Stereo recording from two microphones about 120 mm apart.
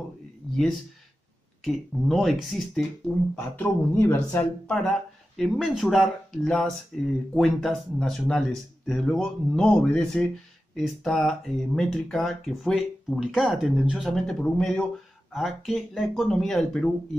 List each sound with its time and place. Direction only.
0.5 s a sound: 5° left (ahead or behind)
1.6 s speech: centre (ahead or behind)
3.3 s speech: 15° left (ahead or behind)
5.4 s speech: centre (ahead or behind)